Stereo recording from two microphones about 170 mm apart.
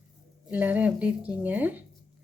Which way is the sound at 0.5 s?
10° right (ahead or behind).